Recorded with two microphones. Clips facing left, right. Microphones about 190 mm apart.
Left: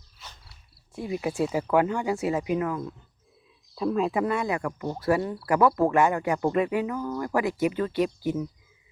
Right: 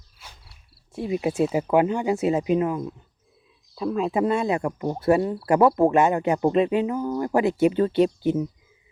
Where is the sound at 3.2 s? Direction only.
Centre (ahead or behind).